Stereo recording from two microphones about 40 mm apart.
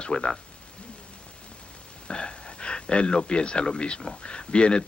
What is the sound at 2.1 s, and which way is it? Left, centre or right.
Speech, left.